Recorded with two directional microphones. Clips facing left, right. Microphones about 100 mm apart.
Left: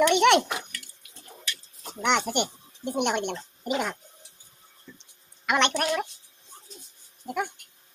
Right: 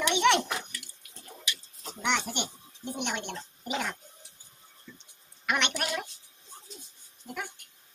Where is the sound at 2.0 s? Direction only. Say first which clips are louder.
Left 6 dB; 65° left (ahead or behind).